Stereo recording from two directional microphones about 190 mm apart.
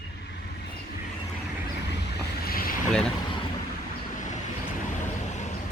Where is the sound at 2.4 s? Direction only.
50° left (ahead or behind).